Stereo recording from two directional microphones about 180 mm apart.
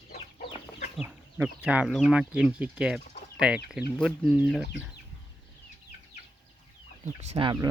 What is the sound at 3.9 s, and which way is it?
Speech, 5° left (ahead or behind).